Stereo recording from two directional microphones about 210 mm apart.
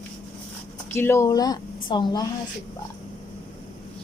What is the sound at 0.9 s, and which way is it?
Speech, 10° left (ahead or behind).